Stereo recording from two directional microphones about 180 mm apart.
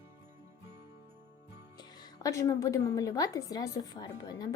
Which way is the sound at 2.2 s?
15° left (ahead or behind).